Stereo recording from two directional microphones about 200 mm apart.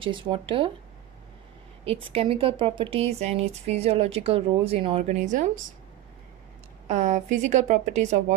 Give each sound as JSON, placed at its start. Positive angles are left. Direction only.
{"t": 0.0, "sound": "speech", "side_deg": -25}
{"t": 1.9, "sound": "speech", "side_deg": -25}
{"t": 6.9, "sound": "speech", "side_deg": -40}